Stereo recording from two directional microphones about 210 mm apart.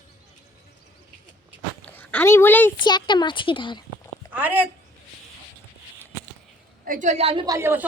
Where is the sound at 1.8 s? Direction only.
10° left (ahead or behind).